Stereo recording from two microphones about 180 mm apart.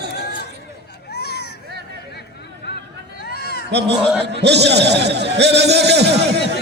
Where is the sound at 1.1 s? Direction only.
65° left (ahead or behind).